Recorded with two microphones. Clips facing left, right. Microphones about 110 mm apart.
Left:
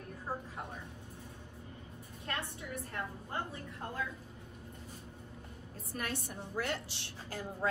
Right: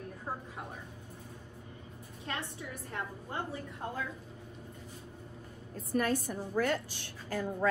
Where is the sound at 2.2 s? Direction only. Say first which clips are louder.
Right 1 dB; 25° right (ahead or behind).